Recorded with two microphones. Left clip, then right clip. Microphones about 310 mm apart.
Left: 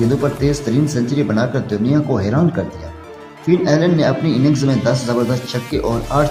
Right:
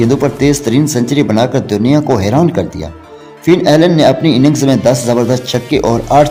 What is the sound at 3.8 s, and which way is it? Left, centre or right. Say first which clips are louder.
Speech: right 7 dB; right.